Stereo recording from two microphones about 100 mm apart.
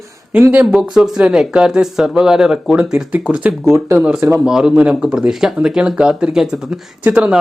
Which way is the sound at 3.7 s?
25° right (ahead or behind).